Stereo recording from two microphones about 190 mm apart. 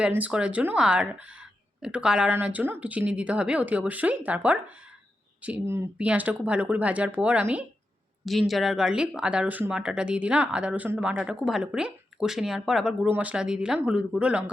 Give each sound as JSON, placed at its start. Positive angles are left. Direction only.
{"t": 0.0, "sound": "speech", "side_deg": -5}